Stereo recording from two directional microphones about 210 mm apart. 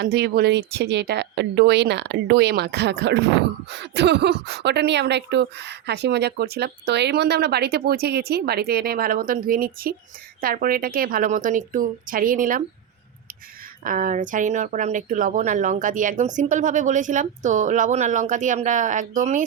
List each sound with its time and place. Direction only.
0.0 s speech: 50° right (ahead or behind)
13.8 s speech: 40° right (ahead or behind)